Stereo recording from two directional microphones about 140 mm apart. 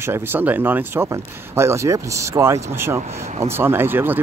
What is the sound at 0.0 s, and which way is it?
Speech, 15° right (ahead or behind).